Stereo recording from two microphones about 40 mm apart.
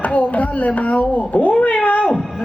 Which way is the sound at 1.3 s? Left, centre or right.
Left.